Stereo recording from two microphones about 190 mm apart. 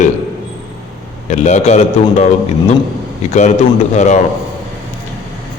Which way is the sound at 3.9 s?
40° left (ahead or behind).